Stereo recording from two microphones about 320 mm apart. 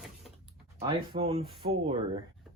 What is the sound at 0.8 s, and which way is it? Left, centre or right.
Speech, centre.